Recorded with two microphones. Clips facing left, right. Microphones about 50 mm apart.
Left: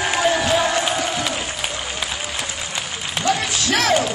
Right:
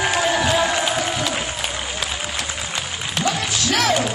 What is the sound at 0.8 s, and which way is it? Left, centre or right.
Crowd, centre.